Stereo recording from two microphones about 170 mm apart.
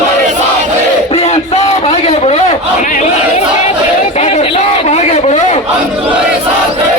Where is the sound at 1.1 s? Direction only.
40° left (ahead or behind).